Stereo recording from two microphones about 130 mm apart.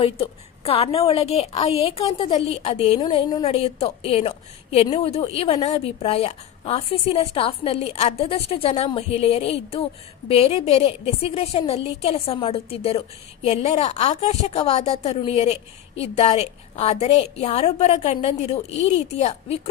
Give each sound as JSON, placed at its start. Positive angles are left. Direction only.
{"t": 0.0, "sound": "a woman's voice", "side_deg": 50}
{"t": 3.0, "sound": "speech", "side_deg": 35}
{"t": 3.5, "sound": "a woman's voice", "side_deg": 50}